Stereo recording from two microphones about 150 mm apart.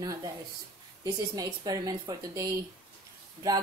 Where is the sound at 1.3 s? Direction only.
25° right (ahead or behind).